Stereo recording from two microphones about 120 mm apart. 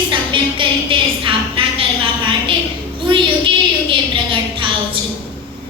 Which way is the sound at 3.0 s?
45° right (ahead or behind).